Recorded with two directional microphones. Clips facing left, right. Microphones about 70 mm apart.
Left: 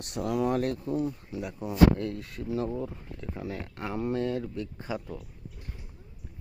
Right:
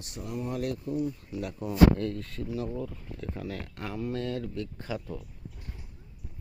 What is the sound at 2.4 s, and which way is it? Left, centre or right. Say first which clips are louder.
Speech: left 3 dB; left.